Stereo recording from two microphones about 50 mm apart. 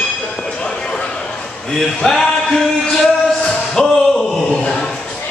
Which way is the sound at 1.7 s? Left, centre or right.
Centre.